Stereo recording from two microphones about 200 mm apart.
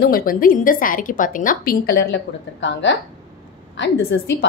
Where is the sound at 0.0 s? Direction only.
45° left (ahead or behind).